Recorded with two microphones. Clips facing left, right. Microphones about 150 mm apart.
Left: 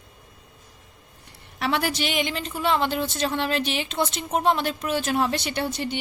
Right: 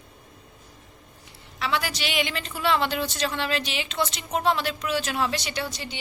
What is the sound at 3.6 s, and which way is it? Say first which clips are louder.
A woman's voice: left 2 dB; 50° left (ahead or behind).